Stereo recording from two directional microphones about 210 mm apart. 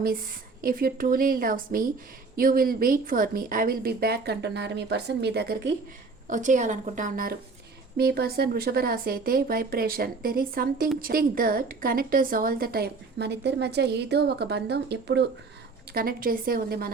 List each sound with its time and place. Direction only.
0.6 s a woman's voice: 45° right (ahead or behind)
6.2 s a woman's voice: 35° right (ahead or behind)